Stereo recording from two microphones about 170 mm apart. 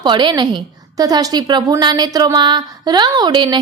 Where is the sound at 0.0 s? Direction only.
25° right (ahead or behind).